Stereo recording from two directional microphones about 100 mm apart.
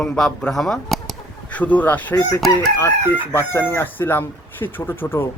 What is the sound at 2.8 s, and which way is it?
Speech, 25° left (ahead or behind).